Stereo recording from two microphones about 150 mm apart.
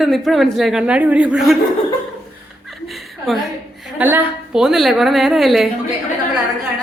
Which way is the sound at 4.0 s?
10° right (ahead or behind).